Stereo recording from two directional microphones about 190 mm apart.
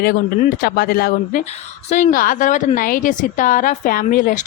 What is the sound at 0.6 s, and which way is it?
A woman's voice, 50° left (ahead or behind).